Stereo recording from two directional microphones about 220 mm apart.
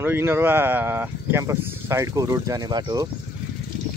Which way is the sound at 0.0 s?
10° right (ahead or behind).